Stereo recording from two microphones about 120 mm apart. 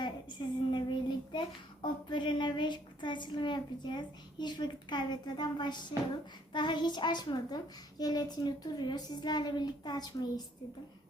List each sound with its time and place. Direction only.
0.0 s child singing: 40° left (ahead or behind)
6.5 s a woman's voice: 40° left (ahead or behind)